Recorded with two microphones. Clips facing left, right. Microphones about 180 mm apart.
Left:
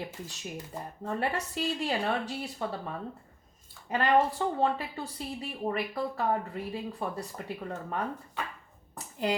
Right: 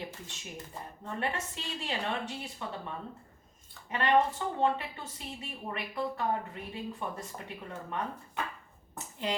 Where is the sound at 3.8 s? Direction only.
35° left (ahead or behind).